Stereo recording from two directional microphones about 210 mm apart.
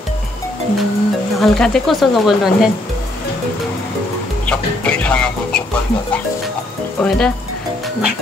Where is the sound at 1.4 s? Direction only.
Centre (ahead or behind).